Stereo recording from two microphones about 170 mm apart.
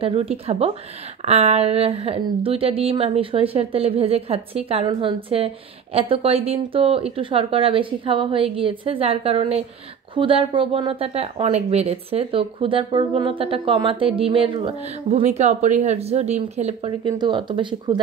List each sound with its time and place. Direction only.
0.0 s speech: 35° right (ahead or behind)
17.0 s speech: 25° right (ahead or behind)